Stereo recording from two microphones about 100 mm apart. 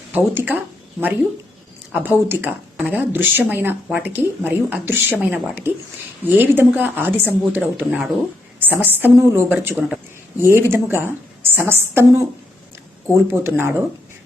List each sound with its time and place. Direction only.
0.1 s speech: 20° right (ahead or behind)
9.7 s a man's voice: 10° right (ahead or behind)
10.4 s speech: 25° right (ahead or behind)
13.4 s speech: 25° right (ahead or behind)